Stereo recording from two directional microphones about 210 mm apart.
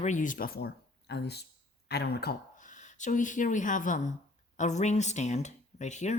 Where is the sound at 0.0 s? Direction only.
35° left (ahead or behind).